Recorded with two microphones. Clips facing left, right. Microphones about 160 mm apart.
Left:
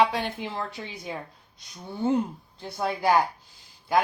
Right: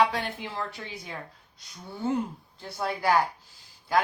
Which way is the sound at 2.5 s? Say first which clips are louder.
Left 2 dB; 20° left (ahead or behind).